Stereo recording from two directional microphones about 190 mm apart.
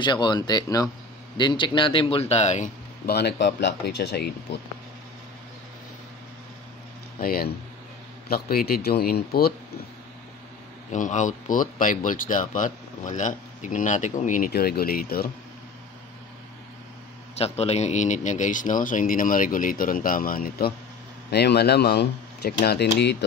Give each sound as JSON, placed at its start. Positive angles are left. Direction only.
{"t": 0.0, "sound": "a man's voice", "side_deg": 25}
{"t": 3.1, "sound": "speech", "side_deg": 60}
{"t": 7.2, "sound": "speech", "side_deg": 50}
{"t": 10.9, "sound": "speech", "side_deg": 40}
{"t": 17.4, "sound": "speech", "side_deg": 35}